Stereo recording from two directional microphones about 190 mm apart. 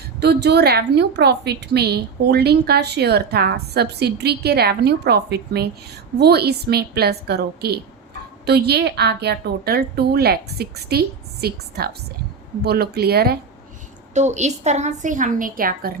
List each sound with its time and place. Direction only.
0.2 s a woman's voice: 60° right (ahead or behind)
14.1 s a woman's voice: 40° right (ahead or behind)